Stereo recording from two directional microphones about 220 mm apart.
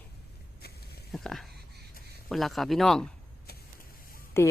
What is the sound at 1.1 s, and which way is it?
Speech, centre (ahead or behind).